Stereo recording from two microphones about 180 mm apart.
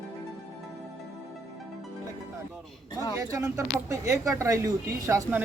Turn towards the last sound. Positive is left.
turn(degrees=-15)  # may be behind; listen again after turning